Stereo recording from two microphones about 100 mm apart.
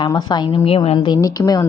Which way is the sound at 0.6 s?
70° left (ahead or behind).